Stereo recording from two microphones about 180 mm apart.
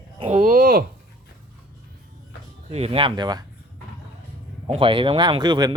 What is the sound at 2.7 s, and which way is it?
Speech, 35° right (ahead or behind).